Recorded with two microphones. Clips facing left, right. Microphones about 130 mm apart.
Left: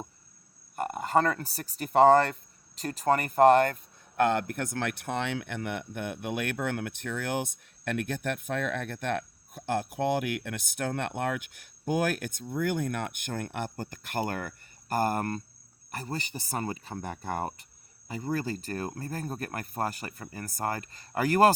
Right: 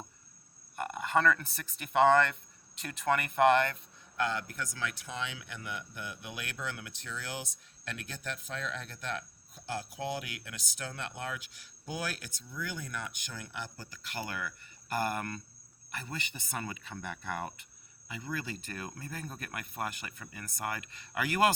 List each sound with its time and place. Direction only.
0.8 s speech: 40° left (ahead or behind)
4.2 s speech: 55° left (ahead or behind); by 21.5 s 40° left (ahead or behind)